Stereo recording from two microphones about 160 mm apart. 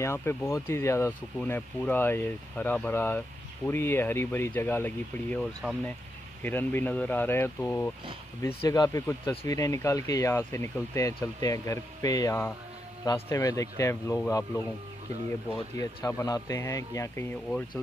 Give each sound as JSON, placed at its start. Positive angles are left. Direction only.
{"t": 0.0, "sound": "speech", "side_deg": 15}
{"t": 9.0, "sound": "speech", "side_deg": 10}
{"t": 15.8, "sound": "speech", "side_deg": 20}